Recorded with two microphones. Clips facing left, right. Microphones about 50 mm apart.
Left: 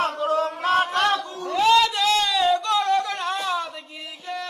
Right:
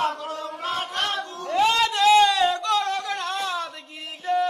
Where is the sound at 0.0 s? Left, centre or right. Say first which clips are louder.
Left 5 dB; left.